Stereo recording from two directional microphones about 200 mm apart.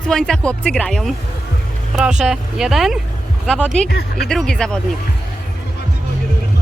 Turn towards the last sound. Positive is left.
turn(degrees=5)  # may be behind; listen again after turning